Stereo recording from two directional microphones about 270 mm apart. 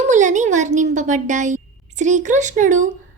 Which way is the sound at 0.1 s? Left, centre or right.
Right.